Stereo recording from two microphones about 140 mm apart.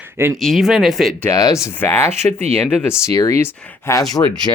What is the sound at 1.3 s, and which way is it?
Speech, 25° left (ahead or behind).